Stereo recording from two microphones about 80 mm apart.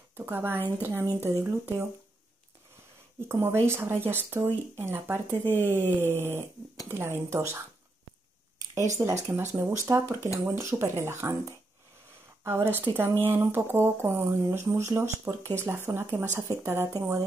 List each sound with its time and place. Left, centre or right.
0.1 s speech: right
3.3 s speech: right
3.6 s mantra: right
5.4 s speech: left
5.9 s mantra: right
6.9 s speech: right
8.7 s speech: right
12.4 s mantra: right
14.5 s speech: right